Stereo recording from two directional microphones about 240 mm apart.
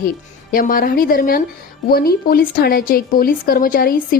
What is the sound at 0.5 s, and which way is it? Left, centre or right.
A woman's voice, left.